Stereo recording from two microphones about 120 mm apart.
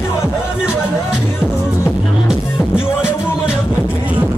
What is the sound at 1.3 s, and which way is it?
Music, 20° left (ahead or behind).